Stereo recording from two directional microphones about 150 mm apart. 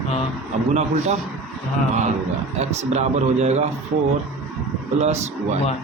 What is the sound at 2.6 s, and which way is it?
Speech, 45° right (ahead or behind).